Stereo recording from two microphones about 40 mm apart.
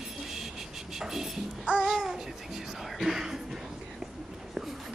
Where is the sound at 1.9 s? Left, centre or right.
Centre.